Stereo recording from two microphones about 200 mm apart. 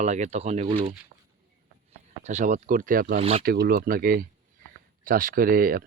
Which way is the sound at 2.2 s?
35° right (ahead or behind).